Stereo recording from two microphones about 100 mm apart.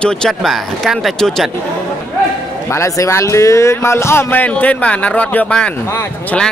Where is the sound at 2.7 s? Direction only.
30° left (ahead or behind).